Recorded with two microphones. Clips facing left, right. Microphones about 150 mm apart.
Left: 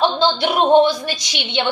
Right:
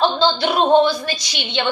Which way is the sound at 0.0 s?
15° left (ahead or behind).